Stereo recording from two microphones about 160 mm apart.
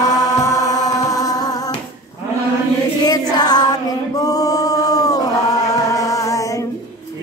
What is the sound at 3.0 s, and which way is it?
Music, 25° left (ahead or behind).